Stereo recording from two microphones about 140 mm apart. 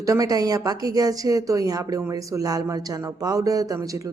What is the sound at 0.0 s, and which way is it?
Speech, 25° right (ahead or behind).